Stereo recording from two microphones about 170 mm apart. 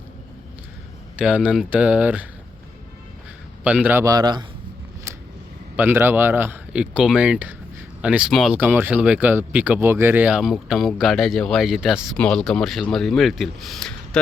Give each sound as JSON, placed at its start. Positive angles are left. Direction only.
{"t": 1.2, "sound": "speech", "side_deg": -5}
{"t": 3.6, "sound": "speech", "side_deg": -10}
{"t": 5.7, "sound": "speech", "side_deg": -10}